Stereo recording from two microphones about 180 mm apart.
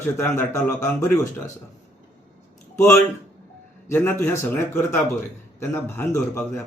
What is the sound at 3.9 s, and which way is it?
A man's voice, 15° left (ahead or behind).